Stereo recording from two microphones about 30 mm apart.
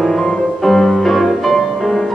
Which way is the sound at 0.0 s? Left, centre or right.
Centre.